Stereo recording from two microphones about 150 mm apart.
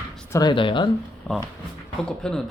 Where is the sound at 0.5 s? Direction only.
35° left (ahead or behind).